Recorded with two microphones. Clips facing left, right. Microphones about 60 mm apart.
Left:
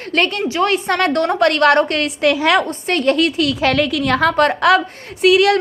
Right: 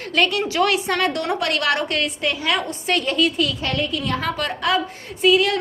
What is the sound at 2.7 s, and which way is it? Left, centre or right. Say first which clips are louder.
A woman's voice: left 6 dB; left.